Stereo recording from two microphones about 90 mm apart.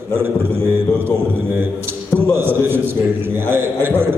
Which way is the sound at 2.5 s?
25° right (ahead or behind).